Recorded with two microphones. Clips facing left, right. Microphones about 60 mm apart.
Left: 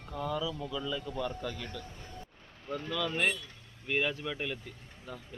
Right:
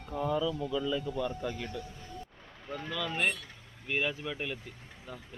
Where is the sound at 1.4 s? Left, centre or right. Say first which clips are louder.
Right 2 dB; centre.